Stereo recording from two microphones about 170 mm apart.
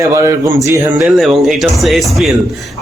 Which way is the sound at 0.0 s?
15° right (ahead or behind).